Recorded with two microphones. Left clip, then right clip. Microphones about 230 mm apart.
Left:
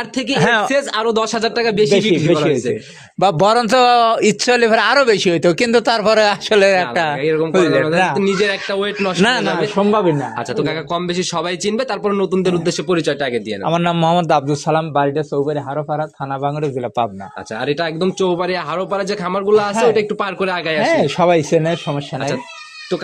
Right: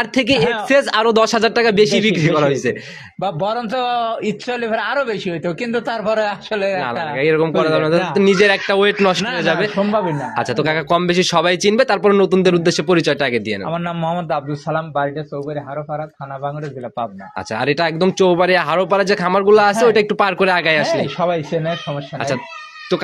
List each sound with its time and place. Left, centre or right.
0.1 s a man's voice: right
0.4 s speech: left
0.7 s a man's voice: right
3.2 s speech: left
7.2 s a man's voice: right
9.8 s speech: left
10.3 s a man's voice: right
13.7 s speech: left
17.6 s a man's voice: right
20.9 s speech: left